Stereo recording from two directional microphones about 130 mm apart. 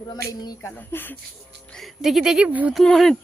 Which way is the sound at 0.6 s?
15° left (ahead or behind).